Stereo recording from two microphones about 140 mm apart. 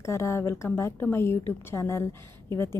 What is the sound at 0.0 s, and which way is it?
A woman's voice, 20° left (ahead or behind).